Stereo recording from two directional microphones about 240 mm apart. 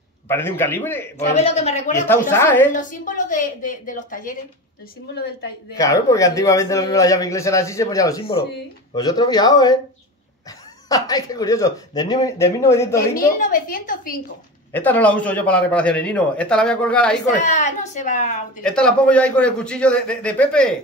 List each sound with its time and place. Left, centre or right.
0.3 s a man's voice: centre
1.1 s a man's voice: left
2.0 s a man's voice: centre
2.7 s a woman's voice: left
5.8 s a man's voice: centre
10.9 s a man's voice: centre
13.2 s a woman's voice: left
14.7 s a man's voice: centre
17.4 s a woman's voice: left
18.6 s a man's voice: centre